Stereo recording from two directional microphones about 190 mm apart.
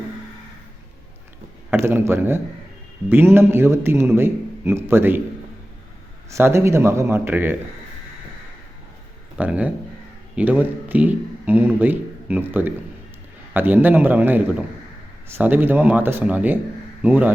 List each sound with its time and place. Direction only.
1.7 s a man's voice: 10° right (ahead or behind)
6.3 s a man's voice: 15° right (ahead or behind)
9.4 s a man's voice: 5° right (ahead or behind)